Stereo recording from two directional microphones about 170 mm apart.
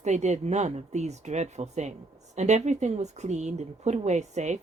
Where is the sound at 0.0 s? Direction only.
40° right (ahead or behind).